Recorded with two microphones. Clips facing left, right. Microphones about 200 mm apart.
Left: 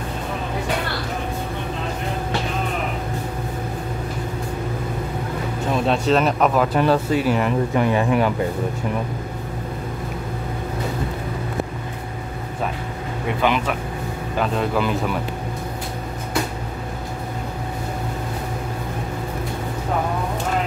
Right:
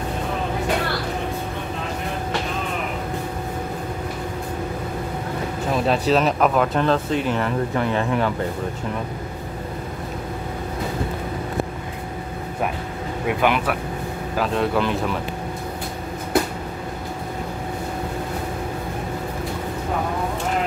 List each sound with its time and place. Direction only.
5.9 s speech: centre (ahead or behind)
13.4 s speech: 10° right (ahead or behind)